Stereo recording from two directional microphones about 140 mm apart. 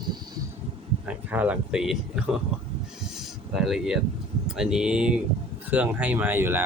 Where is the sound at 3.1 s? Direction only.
Centre (ahead or behind).